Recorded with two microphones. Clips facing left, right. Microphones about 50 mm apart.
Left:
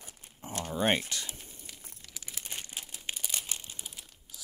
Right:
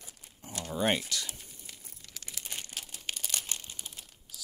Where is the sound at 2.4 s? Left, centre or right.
Centre.